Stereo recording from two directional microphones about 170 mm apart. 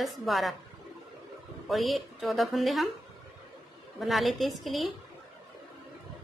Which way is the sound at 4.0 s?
Centre (ahead or behind).